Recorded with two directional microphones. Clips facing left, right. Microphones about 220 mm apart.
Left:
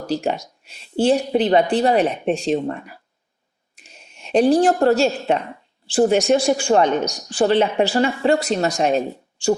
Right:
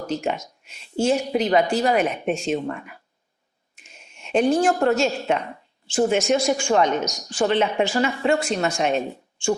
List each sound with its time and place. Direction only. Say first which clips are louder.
0.1 s a woman's voice: left 4 dB; 35° left (ahead or behind)